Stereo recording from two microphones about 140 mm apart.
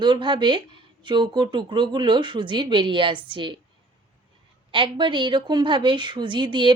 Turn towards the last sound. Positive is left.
turn(degrees=-35)  # may be behind; listen again after turning